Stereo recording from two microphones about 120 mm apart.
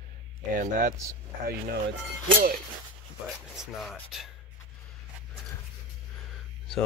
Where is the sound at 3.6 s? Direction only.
Centre (ahead or behind).